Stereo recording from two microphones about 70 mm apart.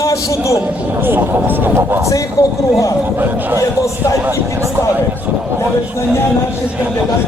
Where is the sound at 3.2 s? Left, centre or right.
Right.